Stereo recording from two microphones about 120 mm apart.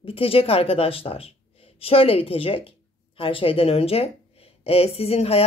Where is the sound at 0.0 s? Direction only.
50° left (ahead or behind).